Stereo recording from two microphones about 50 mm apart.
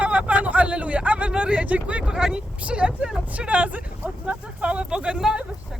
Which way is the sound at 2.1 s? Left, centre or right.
Centre.